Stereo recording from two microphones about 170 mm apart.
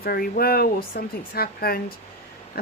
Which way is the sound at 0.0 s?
60° left (ahead or behind).